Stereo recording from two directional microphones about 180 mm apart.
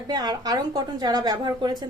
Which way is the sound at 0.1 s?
20° right (ahead or behind).